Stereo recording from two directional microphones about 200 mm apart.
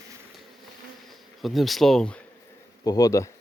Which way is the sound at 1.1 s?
Centre (ahead or behind).